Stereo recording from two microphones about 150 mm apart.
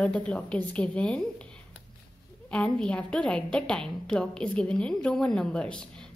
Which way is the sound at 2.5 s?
5° left (ahead or behind).